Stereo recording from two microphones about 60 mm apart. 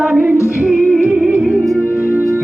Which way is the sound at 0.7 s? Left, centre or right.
Centre.